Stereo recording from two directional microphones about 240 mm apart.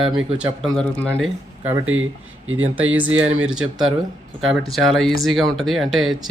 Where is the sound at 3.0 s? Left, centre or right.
Centre.